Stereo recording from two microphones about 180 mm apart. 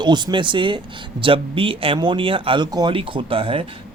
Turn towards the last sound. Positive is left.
turn(degrees=-30)  # may be behind; listen again after turning